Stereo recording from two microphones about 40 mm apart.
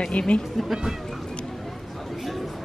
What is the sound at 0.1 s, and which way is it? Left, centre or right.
Speech, left.